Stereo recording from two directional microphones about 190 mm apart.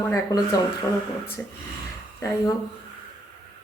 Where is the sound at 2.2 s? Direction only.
15° left (ahead or behind).